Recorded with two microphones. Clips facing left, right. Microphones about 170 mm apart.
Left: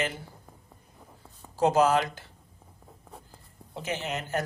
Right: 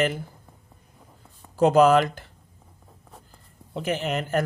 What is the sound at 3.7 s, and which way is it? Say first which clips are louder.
Speech: right 6 dB; 55° right (ahead or behind).